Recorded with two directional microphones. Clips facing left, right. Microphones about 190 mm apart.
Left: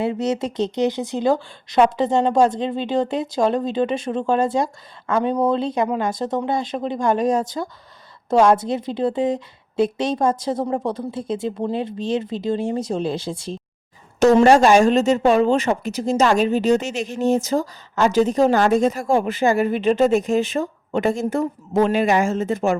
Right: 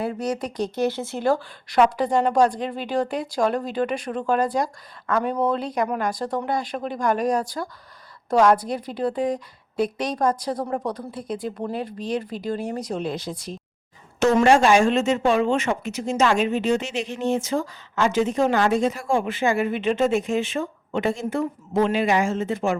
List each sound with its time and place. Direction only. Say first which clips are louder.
0.0 s speech: left 4 dB; 25° left (ahead or behind); by 22.8 s 45° left (ahead or behind)